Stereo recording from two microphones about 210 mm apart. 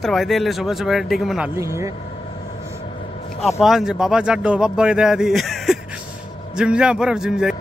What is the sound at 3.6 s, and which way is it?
A man's voice, centre (ahead or behind).